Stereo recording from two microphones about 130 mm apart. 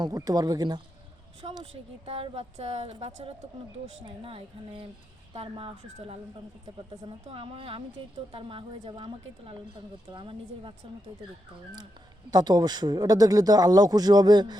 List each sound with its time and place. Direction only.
0.0 s speech: 30° right (ahead or behind)
1.4 s a woman's voice: 45° right (ahead or behind)
12.3 s speech: 30° right (ahead or behind)